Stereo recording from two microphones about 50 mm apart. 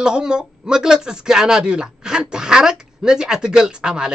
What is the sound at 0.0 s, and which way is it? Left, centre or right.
Speech, centre.